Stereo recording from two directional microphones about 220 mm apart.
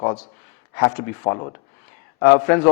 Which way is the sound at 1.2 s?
25° left (ahead or behind).